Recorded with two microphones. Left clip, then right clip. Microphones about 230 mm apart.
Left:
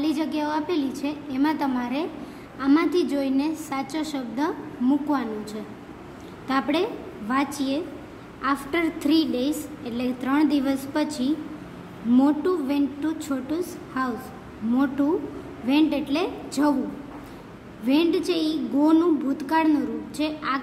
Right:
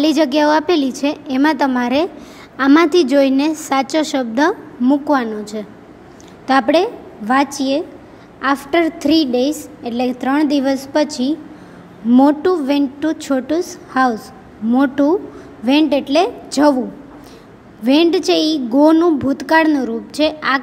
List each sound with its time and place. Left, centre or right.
0.0 s a woman's voice: right
17.8 s a woman's voice: right